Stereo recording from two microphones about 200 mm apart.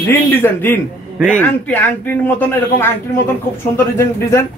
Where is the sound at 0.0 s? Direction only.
10° left (ahead or behind).